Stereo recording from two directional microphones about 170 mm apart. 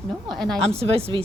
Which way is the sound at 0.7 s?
35° right (ahead or behind).